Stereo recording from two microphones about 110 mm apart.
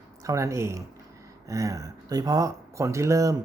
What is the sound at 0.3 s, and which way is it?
Speech, 30° right (ahead or behind).